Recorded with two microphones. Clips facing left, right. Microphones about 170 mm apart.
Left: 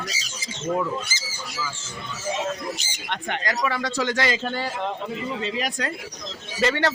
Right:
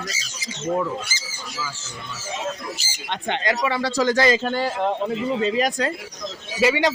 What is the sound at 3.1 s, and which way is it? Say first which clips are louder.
A man's voice: right 4 dB; 25° right (ahead or behind).